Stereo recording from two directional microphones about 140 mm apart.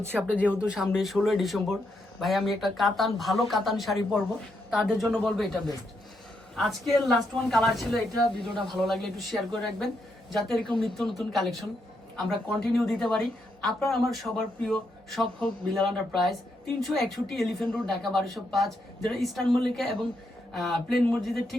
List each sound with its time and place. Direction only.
0.0 s speech: 15° right (ahead or behind); by 21.5 s centre (ahead or behind)